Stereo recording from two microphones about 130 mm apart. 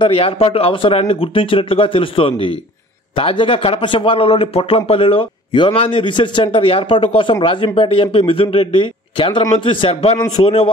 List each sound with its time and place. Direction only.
0.0 s a man's voice: 45° left (ahead or behind)